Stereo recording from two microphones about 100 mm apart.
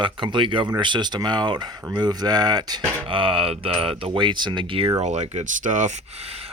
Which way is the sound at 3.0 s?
60° right (ahead or behind).